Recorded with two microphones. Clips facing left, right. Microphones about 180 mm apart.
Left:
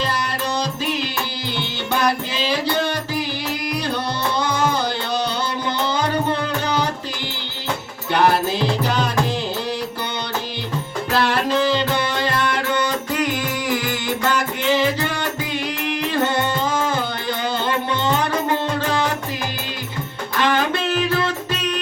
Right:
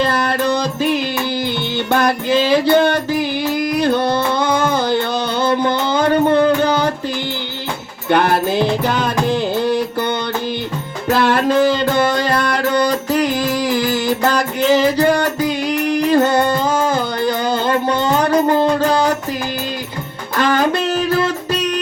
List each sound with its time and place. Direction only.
0.0 s music: 55° right (ahead or behind)
8.1 s music: 55° right (ahead or behind)
11.1 s music: 50° right (ahead or behind)
20.4 s music: 40° right (ahead or behind)